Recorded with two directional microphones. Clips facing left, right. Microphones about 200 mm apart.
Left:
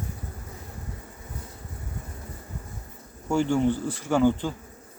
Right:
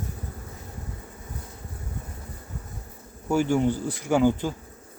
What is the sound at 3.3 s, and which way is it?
Speech, 10° right (ahead or behind).